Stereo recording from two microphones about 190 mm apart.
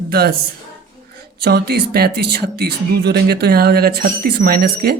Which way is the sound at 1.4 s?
60° right (ahead or behind).